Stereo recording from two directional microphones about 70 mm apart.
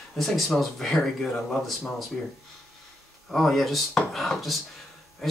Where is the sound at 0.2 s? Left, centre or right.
Centre.